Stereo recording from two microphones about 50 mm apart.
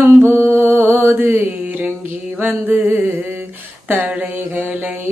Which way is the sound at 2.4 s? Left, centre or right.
Right.